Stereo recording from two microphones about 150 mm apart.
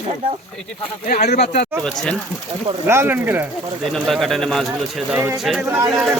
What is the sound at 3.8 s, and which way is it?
Speech, centre (ahead or behind).